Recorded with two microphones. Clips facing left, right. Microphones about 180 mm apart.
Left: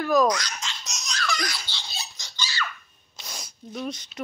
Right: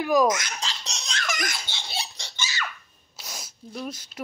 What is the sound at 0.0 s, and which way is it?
Speech, 10° right (ahead or behind).